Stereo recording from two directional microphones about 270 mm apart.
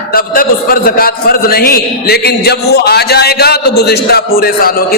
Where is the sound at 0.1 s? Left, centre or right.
Left.